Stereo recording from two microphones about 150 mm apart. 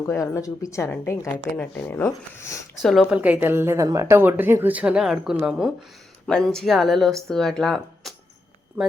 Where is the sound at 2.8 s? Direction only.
Centre (ahead or behind).